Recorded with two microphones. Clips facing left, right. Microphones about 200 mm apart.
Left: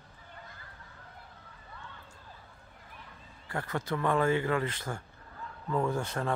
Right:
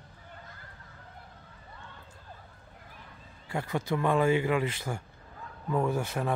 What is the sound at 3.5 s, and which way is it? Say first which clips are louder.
Speech: right 3 dB; 10° right (ahead or behind).